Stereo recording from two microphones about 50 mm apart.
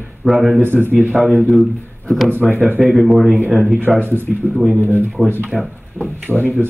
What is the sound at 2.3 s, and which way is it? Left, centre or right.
Speech, right.